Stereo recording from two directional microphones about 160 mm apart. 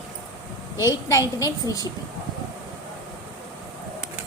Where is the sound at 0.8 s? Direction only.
20° left (ahead or behind).